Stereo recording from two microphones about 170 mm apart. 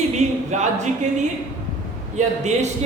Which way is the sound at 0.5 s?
45° right (ahead or behind).